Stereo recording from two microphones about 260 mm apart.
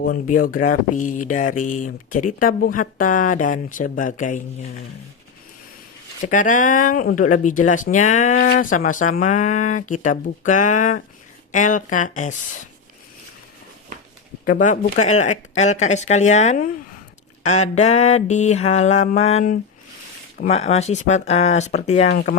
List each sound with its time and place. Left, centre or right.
0.0 s speech: left
6.2 s speech: left
14.4 s speech: left